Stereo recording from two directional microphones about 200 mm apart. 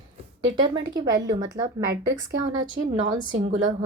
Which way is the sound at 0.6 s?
20° right (ahead or behind).